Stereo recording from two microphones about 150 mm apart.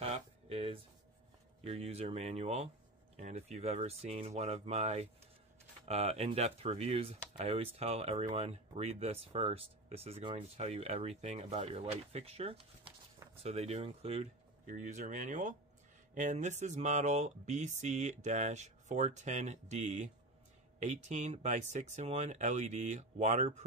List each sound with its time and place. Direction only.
0.0 s a sound: 40° right (ahead or behind)
1.6 s speech: 40° right (ahead or behind)
14.7 s speech: 55° right (ahead or behind)